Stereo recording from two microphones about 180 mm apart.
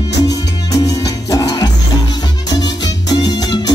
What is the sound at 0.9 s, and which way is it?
Music, 20° left (ahead or behind).